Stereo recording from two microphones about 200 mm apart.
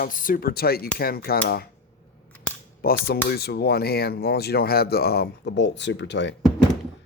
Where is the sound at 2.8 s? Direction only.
50° left (ahead or behind).